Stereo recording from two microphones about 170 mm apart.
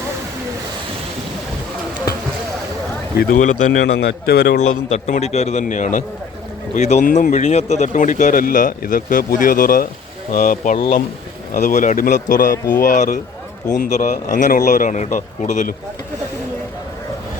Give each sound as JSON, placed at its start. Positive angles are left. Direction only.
{"t": 3.2, "sound": "speech", "side_deg": 50}
{"t": 3.9, "sound": "a man's voice", "side_deg": 70}
{"t": 4.9, "sound": "speech", "side_deg": 40}